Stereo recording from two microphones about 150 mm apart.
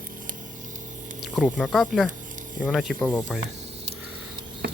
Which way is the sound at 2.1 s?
60° right (ahead or behind).